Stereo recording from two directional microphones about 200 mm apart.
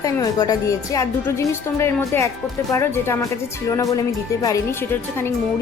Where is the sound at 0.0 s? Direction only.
20° left (ahead or behind).